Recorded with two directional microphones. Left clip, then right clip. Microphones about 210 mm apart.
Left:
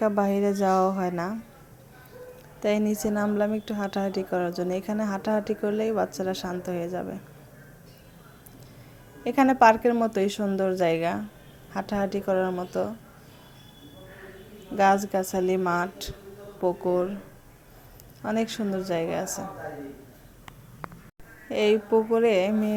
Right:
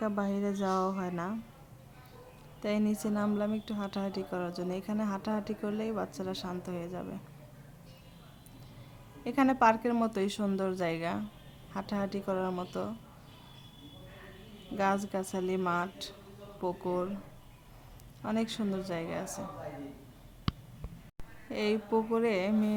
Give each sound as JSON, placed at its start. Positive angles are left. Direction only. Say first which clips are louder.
{"t": 0.0, "sound": "a woman's voice", "louder": "left 10 dB", "side_deg": 10}
{"t": 2.6, "sound": "a woman's voice", "louder": "left 8 dB", "side_deg": 10}
{"t": 9.2, "sound": "a woman's voice", "louder": "left 8 dB", "side_deg": 10}
{"t": 14.8, "sound": "a woman's voice", "louder": "left 10 dB", "side_deg": 10}
{"t": 18.2, "sound": "a woman's voice", "louder": "left 6 dB", "side_deg": 5}
{"t": 21.5, "sound": "a woman's voice", "louder": "left 9 dB", "side_deg": 5}